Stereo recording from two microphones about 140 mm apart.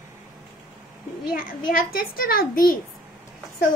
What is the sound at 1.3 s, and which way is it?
A child's voice, 90° left.